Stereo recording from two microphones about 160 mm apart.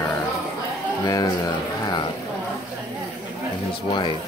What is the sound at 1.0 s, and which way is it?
Speech, 25° left (ahead or behind).